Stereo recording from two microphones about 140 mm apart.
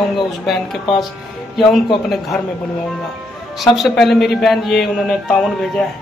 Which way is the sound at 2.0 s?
Centre (ahead or behind).